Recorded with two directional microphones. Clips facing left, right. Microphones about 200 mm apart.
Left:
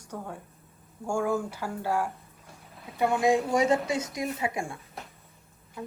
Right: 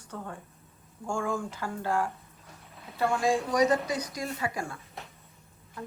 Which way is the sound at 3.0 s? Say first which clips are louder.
Left 3 dB; 20° left (ahead or behind).